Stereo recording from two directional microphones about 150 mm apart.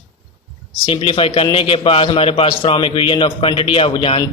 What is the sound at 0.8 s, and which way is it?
A man's voice, 35° left (ahead or behind).